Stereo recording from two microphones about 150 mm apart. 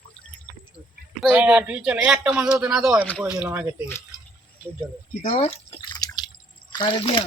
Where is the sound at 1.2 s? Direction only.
10° right (ahead or behind).